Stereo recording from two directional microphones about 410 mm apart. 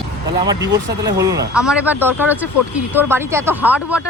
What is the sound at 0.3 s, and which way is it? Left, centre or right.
A man's voice, centre.